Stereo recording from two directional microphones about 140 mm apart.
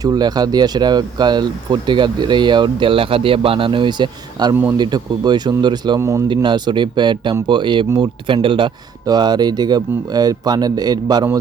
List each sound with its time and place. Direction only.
0.0 s speech: 30° right (ahead or behind)
6.0 s speech: 20° right (ahead or behind)
6.2 s speech: 35° right (ahead or behind)